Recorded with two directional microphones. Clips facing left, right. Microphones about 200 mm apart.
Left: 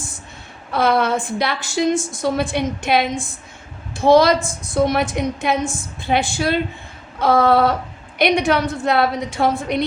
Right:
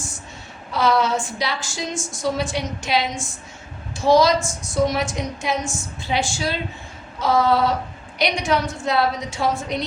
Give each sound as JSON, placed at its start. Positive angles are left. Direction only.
{"t": 0.7, "sound": "a woman's voice", "side_deg": 55}